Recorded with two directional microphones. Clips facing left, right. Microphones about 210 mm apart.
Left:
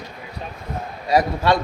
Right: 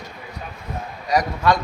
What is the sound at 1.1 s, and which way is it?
Speech, 30° left (ahead or behind).